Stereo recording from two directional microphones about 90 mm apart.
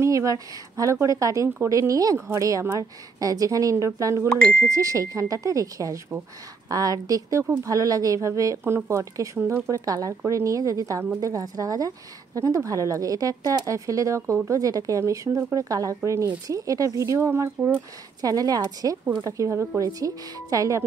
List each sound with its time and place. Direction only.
0.0 s speech: 35° right (ahead or behind)
18.2 s speech: 45° right (ahead or behind)
19.8 s speech: 45° right (ahead or behind)